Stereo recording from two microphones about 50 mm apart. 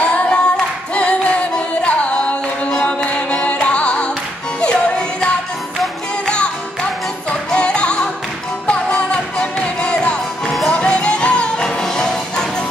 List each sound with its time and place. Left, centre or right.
0.0 s singing: left
4.6 s music: centre